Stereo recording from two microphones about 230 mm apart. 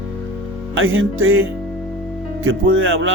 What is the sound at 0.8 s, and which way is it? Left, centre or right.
Speech, right.